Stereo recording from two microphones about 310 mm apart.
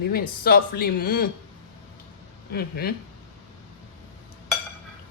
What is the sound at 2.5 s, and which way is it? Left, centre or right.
Speech, left.